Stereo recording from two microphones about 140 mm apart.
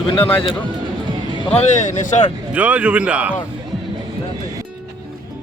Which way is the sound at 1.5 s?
60° left (ahead or behind).